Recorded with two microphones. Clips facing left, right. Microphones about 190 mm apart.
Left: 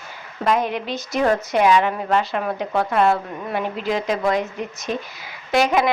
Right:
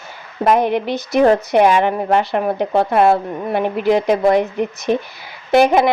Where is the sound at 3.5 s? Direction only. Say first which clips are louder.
Right 8 dB; 60° right (ahead or behind).